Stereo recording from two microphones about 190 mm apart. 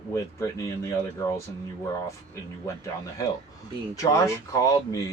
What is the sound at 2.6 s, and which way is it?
Speech, 15° left (ahead or behind).